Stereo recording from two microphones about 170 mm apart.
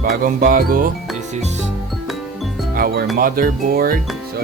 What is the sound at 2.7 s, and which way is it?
Speech, 60° right (ahead or behind).